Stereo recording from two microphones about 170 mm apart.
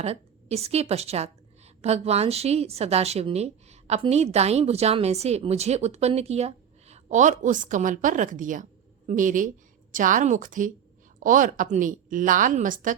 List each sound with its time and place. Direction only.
0.0 s a woman's voice: 40° right (ahead or behind)